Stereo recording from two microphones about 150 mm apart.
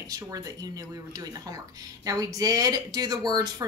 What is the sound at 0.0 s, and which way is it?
Speech, 25° right (ahead or behind).